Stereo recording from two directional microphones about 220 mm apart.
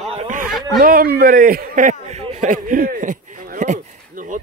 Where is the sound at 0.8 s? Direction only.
40° right (ahead or behind).